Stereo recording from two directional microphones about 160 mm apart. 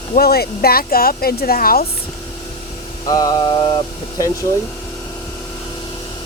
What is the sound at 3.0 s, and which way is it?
Mantra, 25° left (ahead or behind).